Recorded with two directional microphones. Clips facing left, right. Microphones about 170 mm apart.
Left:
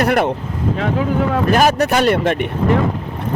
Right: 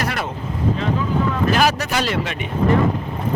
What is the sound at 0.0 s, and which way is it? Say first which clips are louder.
Speech: left 9 dB; 55° left (ahead or behind).